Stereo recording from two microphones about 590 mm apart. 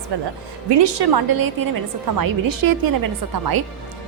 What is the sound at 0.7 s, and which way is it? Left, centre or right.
A woman's voice, right.